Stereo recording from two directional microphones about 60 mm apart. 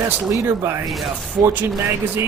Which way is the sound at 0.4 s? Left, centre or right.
Right.